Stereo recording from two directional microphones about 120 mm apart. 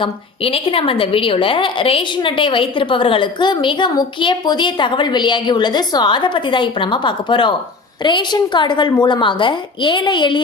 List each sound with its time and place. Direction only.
0.0 s a woman's voice: 50° left (ahead or behind)